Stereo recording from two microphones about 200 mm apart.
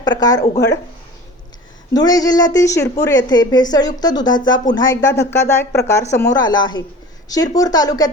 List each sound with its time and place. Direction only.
0.0 s speech: 20° left (ahead or behind)
1.9 s speech: 20° left (ahead or behind)